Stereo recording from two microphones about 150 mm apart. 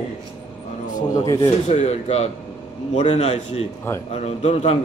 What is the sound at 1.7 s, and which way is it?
A man's voice, 45° left (ahead or behind).